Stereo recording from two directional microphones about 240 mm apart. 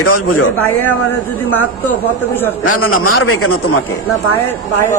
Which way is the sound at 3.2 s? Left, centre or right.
Left.